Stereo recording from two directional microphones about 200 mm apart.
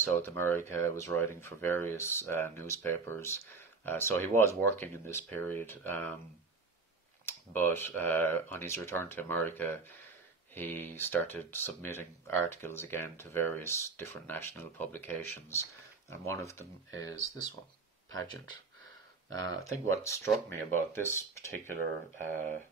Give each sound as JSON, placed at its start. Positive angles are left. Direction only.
{"t": 0.1, "sound": "speech", "side_deg": 10}
{"t": 7.2, "sound": "speech", "side_deg": 10}
{"t": 17.1, "sound": "speech", "side_deg": -80}
{"t": 19.2, "sound": "speech", "side_deg": 20}
{"t": 21.7, "sound": "speech", "side_deg": -40}